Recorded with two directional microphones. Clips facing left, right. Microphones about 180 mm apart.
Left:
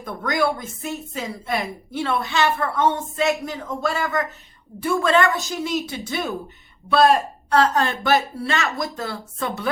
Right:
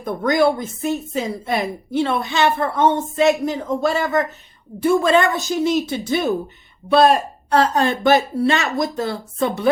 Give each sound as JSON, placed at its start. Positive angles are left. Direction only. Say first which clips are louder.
{"t": 0.0, "sound": "speech", "louder": "right 6 dB", "side_deg": -25}
{"t": 6.1, "sound": "speech", "louder": "right 8 dB", "side_deg": -35}
{"t": 6.9, "sound": "speech", "louder": "right 2 dB", "side_deg": -20}